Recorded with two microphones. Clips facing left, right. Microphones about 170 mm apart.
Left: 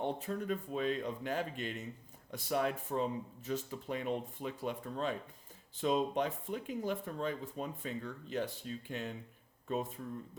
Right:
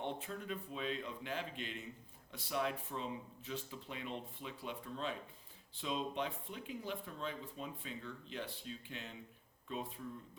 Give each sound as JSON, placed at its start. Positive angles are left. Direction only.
{"t": 0.0, "sound": "speech", "side_deg": 40}